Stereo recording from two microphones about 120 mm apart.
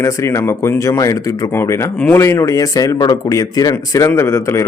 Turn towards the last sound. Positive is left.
turn(degrees=25)  # may be behind; listen again after turning